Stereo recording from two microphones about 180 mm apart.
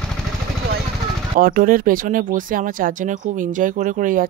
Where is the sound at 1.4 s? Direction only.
50° right (ahead or behind).